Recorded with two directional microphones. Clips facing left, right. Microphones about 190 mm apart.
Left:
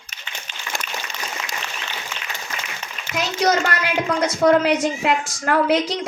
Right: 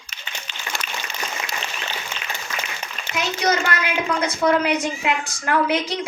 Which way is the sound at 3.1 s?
30° right (ahead or behind).